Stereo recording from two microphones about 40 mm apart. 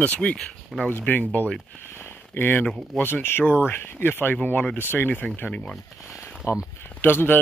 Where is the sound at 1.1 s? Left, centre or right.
Left.